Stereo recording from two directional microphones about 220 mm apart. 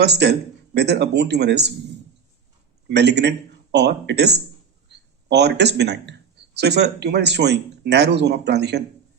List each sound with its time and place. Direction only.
0.0 s speech: 50° right (ahead or behind)
2.9 s a man's voice: 50° right (ahead or behind)